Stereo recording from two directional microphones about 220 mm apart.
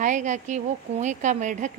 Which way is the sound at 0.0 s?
35° right (ahead or behind).